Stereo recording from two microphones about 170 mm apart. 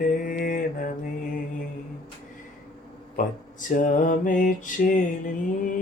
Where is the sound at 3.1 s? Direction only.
50° left (ahead or behind).